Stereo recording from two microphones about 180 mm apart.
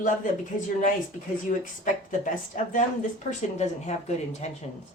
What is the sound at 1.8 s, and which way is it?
A woman's voice, 45° left (ahead or behind).